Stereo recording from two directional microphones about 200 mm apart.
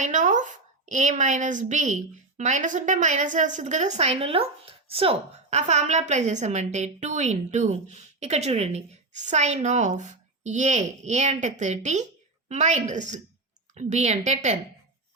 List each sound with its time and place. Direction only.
0.0 s a woman's voice: 40° right (ahead or behind)